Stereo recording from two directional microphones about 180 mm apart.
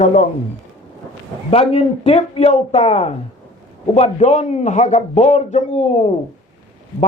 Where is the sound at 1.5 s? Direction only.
35° left (ahead or behind).